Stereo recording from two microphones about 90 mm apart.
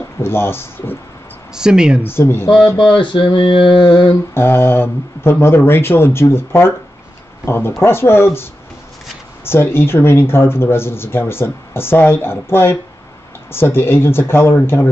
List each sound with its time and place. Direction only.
0.2 s speech: 25° left (ahead or behind)
1.5 s speech: 10° right (ahead or behind)
2.0 s speech: 25° left (ahead or behind)
2.9 s a sound: 65° left (ahead or behind)
4.3 s speech: 25° left (ahead or behind)